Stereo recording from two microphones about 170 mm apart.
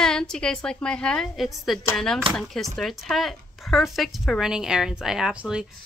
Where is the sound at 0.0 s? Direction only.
5° left (ahead or behind).